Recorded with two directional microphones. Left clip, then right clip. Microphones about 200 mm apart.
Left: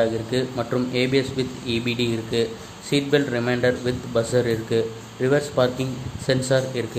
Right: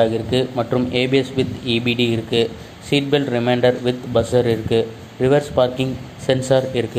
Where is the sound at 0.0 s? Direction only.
15° right (ahead or behind).